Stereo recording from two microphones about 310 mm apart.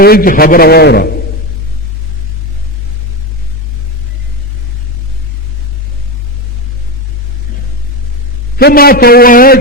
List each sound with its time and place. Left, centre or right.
0.0 s a man's voice: left
8.5 s a man's voice: left